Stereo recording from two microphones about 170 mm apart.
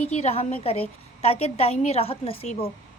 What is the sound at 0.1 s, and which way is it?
A woman's voice, 40° left (ahead or behind).